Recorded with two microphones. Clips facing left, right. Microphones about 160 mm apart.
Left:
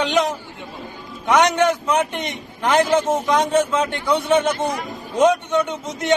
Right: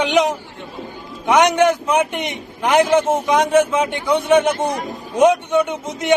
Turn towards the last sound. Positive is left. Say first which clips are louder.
# right 2 dB
turn(degrees=-15)  # may be behind; listen again after turning